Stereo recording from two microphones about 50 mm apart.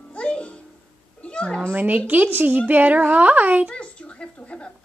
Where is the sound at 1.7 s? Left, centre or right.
Right.